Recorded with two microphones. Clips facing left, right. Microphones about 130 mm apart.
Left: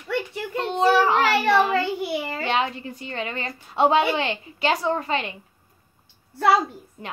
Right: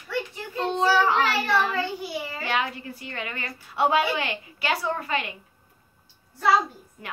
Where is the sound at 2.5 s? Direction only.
25° left (ahead or behind).